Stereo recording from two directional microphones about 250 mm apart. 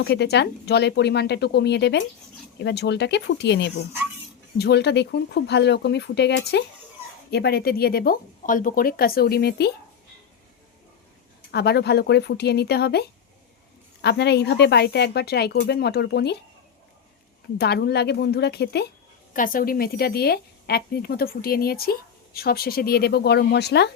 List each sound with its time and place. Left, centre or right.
0.0 s a woman's voice: left
11.5 s a woman's voice: left
17.6 s a woman's voice: left